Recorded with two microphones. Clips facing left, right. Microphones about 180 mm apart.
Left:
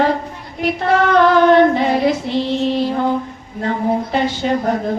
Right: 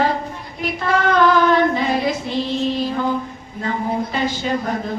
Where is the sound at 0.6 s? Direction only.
65° left (ahead or behind).